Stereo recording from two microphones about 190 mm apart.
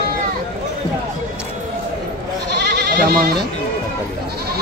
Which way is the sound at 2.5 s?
60° right (ahead or behind).